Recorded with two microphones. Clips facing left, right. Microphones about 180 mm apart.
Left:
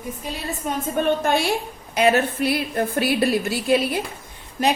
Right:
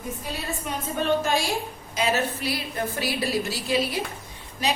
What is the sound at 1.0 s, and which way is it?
A woman's voice, 60° left (ahead or behind).